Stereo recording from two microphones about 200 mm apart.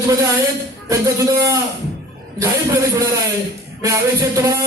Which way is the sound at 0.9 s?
15° right (ahead or behind).